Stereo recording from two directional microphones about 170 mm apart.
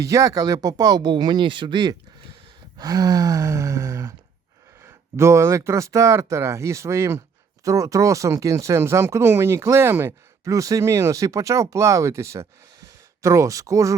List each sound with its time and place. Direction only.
0.0 s speech: 20° right (ahead or behind)